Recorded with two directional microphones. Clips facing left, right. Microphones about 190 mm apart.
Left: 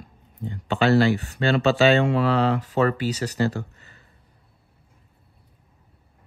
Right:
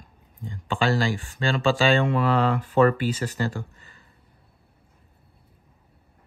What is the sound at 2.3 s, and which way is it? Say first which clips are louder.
Speech: even; 55° right (ahead or behind).